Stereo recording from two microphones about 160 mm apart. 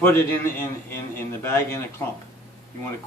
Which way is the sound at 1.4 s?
15° left (ahead or behind).